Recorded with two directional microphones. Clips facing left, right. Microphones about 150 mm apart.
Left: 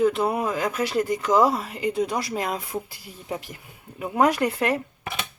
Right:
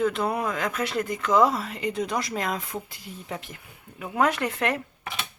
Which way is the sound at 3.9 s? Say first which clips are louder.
Left 3 dB; 10° left (ahead or behind).